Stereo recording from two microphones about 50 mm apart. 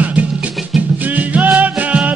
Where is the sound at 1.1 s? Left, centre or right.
Right.